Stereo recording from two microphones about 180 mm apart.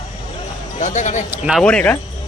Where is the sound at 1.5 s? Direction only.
5° left (ahead or behind).